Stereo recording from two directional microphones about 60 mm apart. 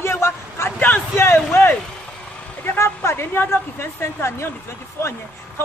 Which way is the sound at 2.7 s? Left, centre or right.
Left.